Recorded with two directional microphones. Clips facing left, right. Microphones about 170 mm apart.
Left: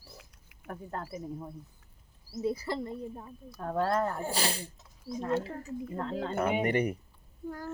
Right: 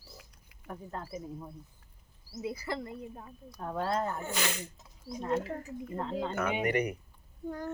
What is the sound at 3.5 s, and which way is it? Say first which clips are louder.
Speech: left 3 dB; 50° left (ahead or behind).